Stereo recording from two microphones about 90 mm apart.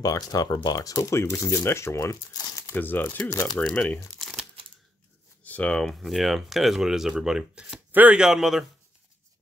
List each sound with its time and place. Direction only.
0.0 s speech: 40° left (ahead or behind)
2.6 s speech: 20° left (ahead or behind)
3.5 s speech: 10° left (ahead or behind)
4.2 s crumpling: centre (ahead or behind)
5.4 s speech: 15° left (ahead or behind); by 8.2 s 15° right (ahead or behind)
8.2 s speech: 5° right (ahead or behind)